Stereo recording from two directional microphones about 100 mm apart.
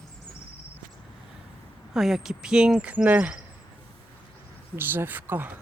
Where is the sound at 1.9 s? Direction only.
5° right (ahead or behind).